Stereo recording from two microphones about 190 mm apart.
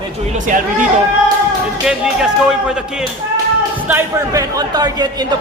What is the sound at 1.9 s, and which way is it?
A man's voice, 5° right (ahead or behind).